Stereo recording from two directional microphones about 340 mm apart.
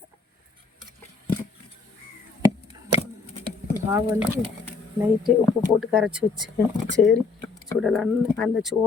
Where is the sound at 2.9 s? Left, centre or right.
Centre.